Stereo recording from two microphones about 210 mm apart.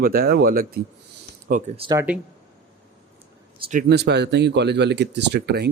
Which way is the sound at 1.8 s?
20° right (ahead or behind).